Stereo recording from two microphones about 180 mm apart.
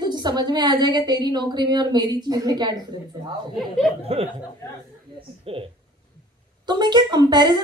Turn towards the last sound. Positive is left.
turn(degrees=-25)  # may be behind; listen again after turning